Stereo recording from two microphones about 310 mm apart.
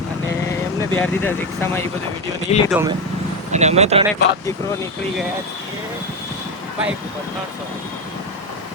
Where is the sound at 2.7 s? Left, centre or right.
Centre.